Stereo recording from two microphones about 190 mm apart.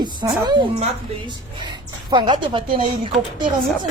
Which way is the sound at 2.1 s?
25° right (ahead or behind).